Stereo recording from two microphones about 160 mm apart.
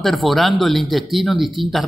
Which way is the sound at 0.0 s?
Centre (ahead or behind).